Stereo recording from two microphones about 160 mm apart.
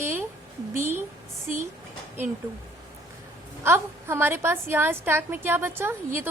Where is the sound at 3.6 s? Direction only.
15° right (ahead or behind).